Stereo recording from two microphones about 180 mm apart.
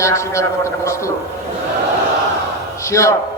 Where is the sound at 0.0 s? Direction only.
15° left (ahead or behind).